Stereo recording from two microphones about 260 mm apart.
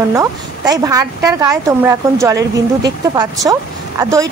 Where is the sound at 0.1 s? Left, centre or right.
Centre.